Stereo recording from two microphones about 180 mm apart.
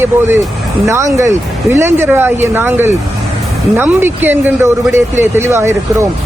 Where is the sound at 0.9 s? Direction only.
15° right (ahead or behind).